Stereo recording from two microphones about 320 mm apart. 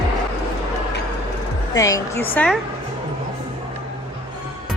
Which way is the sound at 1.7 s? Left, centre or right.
Centre.